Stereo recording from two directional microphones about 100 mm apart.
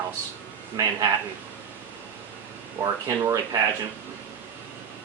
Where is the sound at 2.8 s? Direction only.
35° right (ahead or behind).